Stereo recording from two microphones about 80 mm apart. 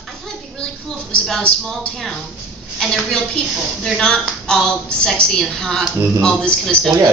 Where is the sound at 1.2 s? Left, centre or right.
Centre.